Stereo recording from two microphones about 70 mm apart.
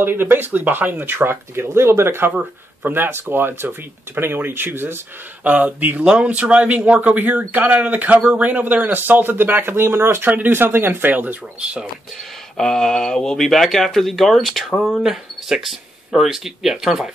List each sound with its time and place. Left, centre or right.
0.0 s speech: right
5.4 s speech: right
12.5 s speech: centre